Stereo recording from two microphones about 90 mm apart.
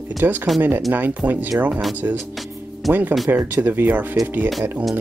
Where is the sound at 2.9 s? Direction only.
20° right (ahead or behind).